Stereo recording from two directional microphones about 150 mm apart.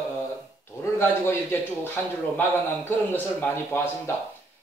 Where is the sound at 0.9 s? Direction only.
15° left (ahead or behind).